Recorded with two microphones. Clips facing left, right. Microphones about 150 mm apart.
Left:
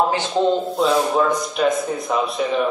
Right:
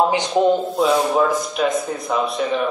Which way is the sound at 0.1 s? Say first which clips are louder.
Right 2 dB; 15° right (ahead or behind).